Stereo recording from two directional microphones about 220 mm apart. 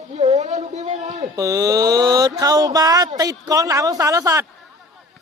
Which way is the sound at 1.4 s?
15° right (ahead or behind).